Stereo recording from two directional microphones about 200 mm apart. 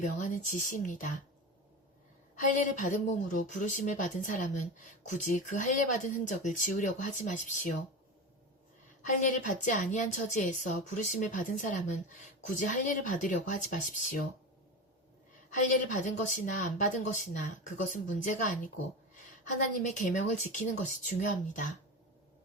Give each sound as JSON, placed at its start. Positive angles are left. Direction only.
{"t": 0.0, "sound": "a woman's voice", "side_deg": 40}
{"t": 2.4, "sound": "a woman's voice", "side_deg": 40}
{"t": 9.0, "sound": "a woman's voice", "side_deg": 40}
{"t": 15.9, "sound": "a woman's voice", "side_deg": 40}